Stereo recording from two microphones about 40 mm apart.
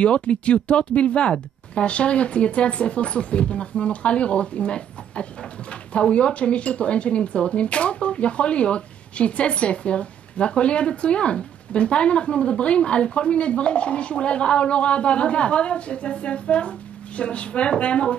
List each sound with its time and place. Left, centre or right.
0.0 s speech: left